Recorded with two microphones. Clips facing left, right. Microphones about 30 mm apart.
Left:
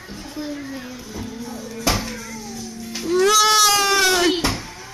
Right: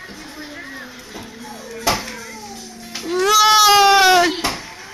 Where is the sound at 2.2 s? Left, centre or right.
Right.